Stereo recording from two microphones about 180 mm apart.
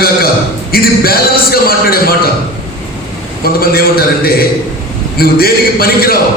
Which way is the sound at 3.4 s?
55° left (ahead or behind).